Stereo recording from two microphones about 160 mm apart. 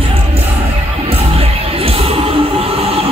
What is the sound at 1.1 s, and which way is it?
Music, 35° right (ahead or behind).